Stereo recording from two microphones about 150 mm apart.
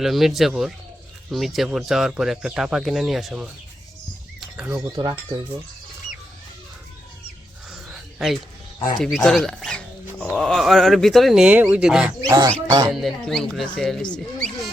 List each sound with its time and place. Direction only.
0.0 s speech: centre (ahead or behind)
4.4 s a sound: 5° right (ahead or behind)
4.7 s speech: 25° right (ahead or behind)
7.7 s a sound: 5° right (ahead or behind)
9.0 s speech: centre (ahead or behind)
12.2 s speech: 20° right (ahead or behind)
12.9 s speech: centre (ahead or behind)